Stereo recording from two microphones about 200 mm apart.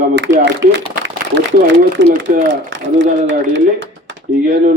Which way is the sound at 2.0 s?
65° right (ahead or behind).